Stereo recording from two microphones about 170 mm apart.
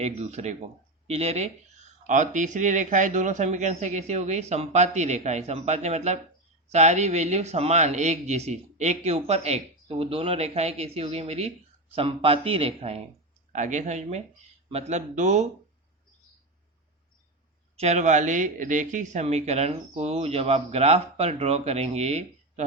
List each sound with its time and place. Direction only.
0.0 s speech: 40° right (ahead or behind)
13.5 s speech: 45° right (ahead or behind)
17.7 s speech: 40° right (ahead or behind)